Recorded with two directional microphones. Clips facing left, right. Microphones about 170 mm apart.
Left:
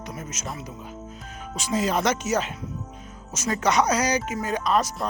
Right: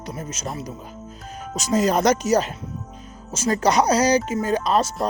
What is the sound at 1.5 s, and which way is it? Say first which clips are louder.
Speech: right 5 dB; 40° right (ahead or behind).